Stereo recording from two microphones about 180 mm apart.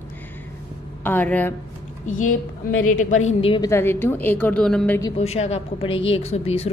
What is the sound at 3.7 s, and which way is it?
A woman's voice, 15° left (ahead or behind).